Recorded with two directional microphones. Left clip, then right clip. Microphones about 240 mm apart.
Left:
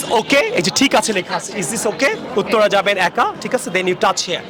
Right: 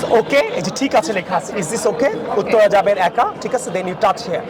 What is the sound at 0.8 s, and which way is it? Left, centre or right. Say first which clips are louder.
Speech: right 2 dB; left.